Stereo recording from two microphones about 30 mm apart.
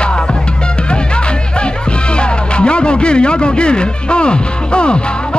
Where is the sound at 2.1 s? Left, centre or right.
Left.